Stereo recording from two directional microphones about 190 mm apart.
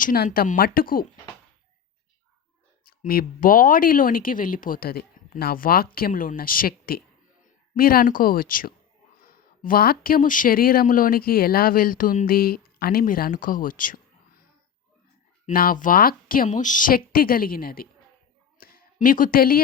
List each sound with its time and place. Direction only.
0.0 s speech: 45° left (ahead or behind)
2.8 s speech: 50° left (ahead or behind)
15.4 s speech: 45° left (ahead or behind)
18.5 s a sound: 50° left (ahead or behind)